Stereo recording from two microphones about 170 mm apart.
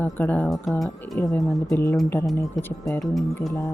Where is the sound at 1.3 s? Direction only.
15° left (ahead or behind).